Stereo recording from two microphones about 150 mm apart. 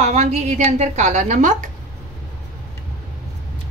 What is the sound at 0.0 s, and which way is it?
A woman's voice, 50° right (ahead or behind).